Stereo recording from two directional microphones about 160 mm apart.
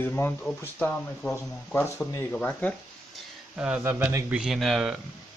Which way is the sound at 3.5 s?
10° right (ahead or behind).